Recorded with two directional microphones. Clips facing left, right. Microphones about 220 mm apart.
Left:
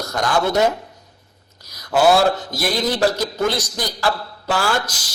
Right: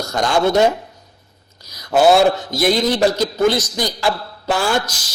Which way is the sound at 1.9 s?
25° right (ahead or behind).